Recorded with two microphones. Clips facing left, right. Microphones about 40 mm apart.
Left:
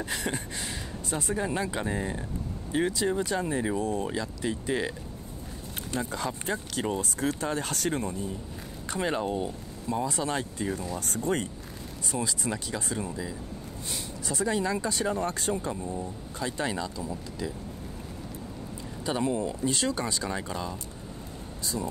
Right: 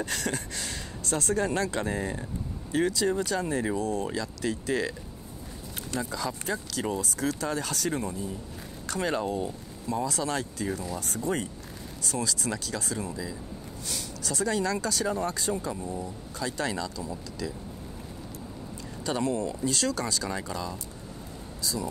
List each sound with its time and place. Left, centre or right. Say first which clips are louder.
0.0 s speech: right 1 dB; centre
2.7 s speech: right 1 dB; left
5.9 s speech: even; left
8.8 s speech: even; left
11.0 s speech: left 3 dB; left
12.1 s speech: even; left
19.0 s speech: even; left